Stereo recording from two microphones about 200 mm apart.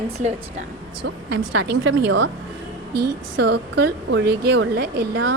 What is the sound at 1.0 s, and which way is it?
Speech, 60° right (ahead or behind).